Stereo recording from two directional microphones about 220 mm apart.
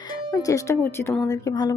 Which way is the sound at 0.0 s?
15° left (ahead or behind).